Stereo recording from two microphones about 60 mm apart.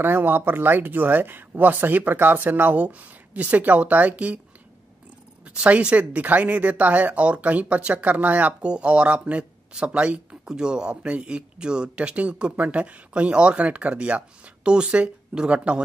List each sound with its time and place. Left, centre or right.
0.0 s speech: right
5.5 s speech: centre